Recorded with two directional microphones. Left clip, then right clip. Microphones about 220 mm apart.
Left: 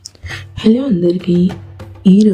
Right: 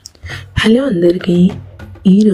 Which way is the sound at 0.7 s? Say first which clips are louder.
Right 2 dB; 20° right (ahead or behind).